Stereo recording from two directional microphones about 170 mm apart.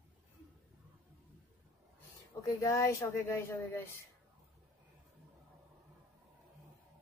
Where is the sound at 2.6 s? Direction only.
20° left (ahead or behind).